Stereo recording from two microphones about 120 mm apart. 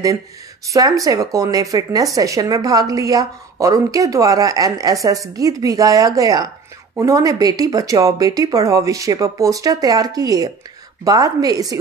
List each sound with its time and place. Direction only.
0.7 s a woman's voice: 30° right (ahead or behind)